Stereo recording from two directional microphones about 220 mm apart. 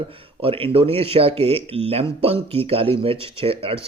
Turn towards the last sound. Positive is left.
turn(degrees=-25)  # may be behind; listen again after turning